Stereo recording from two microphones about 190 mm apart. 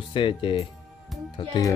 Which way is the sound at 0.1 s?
25° left (ahead or behind).